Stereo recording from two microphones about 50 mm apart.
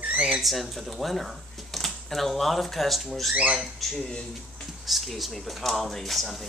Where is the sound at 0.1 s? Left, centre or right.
Centre.